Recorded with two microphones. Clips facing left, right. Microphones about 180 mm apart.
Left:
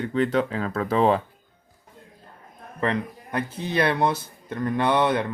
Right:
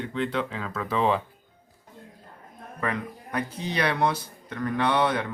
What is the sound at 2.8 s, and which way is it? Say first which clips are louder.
A man's voice: left 5 dB; 25° left (ahead or behind).